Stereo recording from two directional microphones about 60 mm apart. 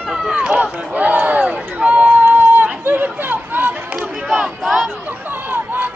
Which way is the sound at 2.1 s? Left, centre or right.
Right.